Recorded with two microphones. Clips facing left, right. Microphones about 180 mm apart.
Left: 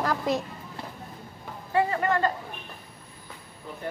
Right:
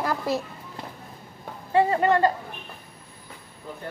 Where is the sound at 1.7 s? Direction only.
25° right (ahead or behind).